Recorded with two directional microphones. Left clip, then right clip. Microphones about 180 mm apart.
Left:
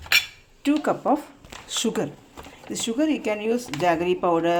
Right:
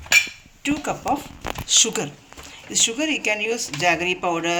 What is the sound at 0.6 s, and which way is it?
Speech, 35° left (ahead or behind).